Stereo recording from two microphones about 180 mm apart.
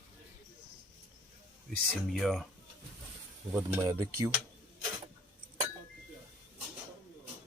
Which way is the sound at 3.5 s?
15° right (ahead or behind).